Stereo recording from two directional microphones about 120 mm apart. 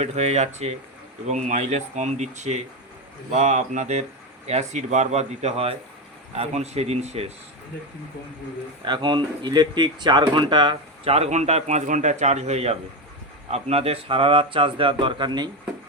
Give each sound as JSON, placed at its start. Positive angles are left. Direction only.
{"t": 0.0, "sound": "speech", "side_deg": -65}
{"t": 1.3, "sound": "speech", "side_deg": -90}
{"t": 8.8, "sound": "speech", "side_deg": -40}
{"t": 11.0, "sound": "speech", "side_deg": -55}